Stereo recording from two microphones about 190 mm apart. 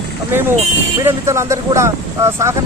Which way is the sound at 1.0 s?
15° right (ahead or behind).